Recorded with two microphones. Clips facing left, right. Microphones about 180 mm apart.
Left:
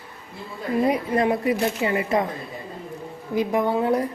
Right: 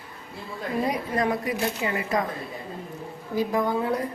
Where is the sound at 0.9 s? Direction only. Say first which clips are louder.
Left 4 dB; 25° left (ahead or behind).